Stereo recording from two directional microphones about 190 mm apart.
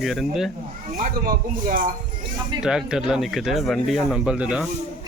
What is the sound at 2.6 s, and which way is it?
Speech, 5° right (ahead or behind).